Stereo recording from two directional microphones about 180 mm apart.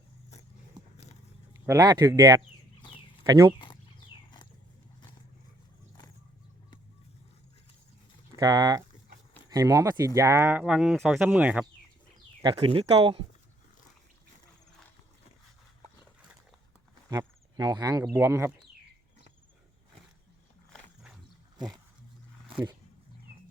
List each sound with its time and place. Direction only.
1.6 s speech: 20° right (ahead or behind)
3.5 s a sound: 25° left (ahead or behind)
8.4 s speech: 20° right (ahead or behind)
12.4 s speech: 30° right (ahead or behind)
17.1 s speech: 20° right (ahead or behind)
20.7 s wild animals: 5° right (ahead or behind)